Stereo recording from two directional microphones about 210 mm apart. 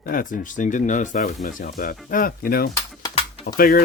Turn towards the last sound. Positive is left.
turn(degrees=45)  # may be behind; listen again after turning